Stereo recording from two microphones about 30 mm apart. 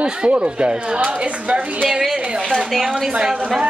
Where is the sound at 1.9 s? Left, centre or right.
Centre.